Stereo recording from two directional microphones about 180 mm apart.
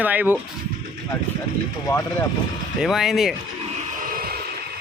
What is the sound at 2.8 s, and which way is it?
Speech, centre (ahead or behind).